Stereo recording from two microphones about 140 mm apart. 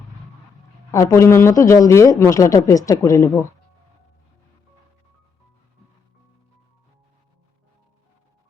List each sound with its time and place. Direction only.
0.9 s a man's voice: 20° left (ahead or behind)